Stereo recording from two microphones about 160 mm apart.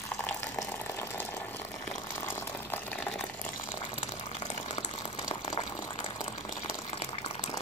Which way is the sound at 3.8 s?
45° left (ahead or behind).